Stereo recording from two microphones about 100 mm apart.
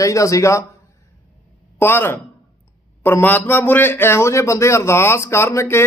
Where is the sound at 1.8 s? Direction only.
20° left (ahead or behind).